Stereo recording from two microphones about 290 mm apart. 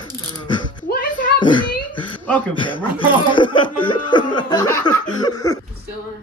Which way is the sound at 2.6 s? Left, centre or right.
Centre.